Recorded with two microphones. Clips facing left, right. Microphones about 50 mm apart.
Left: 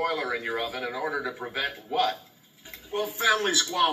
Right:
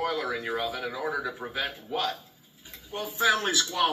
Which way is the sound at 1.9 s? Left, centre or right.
Left.